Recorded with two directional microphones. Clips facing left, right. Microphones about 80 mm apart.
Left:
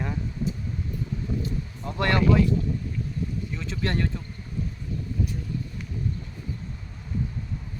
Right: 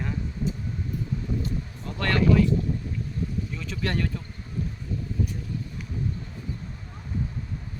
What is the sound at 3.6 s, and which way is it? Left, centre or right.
Speech, left.